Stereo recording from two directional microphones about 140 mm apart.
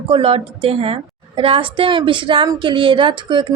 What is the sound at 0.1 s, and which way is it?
A woman's voice, 40° right (ahead or behind).